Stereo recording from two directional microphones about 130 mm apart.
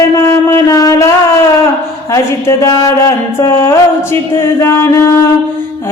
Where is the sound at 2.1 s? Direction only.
20° left (ahead or behind).